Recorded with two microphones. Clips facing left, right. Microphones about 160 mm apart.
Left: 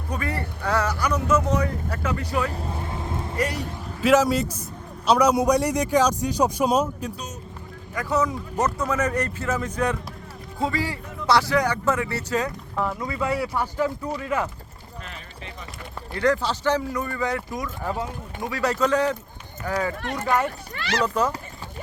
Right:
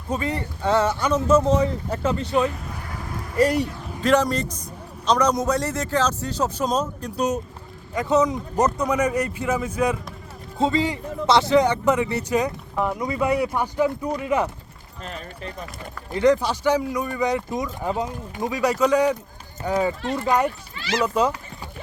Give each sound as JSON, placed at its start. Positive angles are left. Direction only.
{"t": 0.1, "sound": "speech", "side_deg": -20}
{"t": 2.5, "sound": "vehicle", "side_deg": 30}
{"t": 4.0, "sound": "a man's voice", "side_deg": 5}
{"t": 7.9, "sound": "speech", "side_deg": -20}
{"t": 10.6, "sound": "speech", "side_deg": -20}
{"t": 15.0, "sound": "speech", "side_deg": -40}
{"t": 16.1, "sound": "speech", "side_deg": -20}
{"t": 20.0, "sound": "speech", "side_deg": 55}
{"t": 20.2, "sound": "speech", "side_deg": -15}